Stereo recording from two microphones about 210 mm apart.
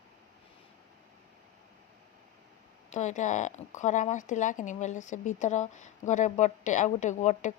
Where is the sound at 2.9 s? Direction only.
35° left (ahead or behind).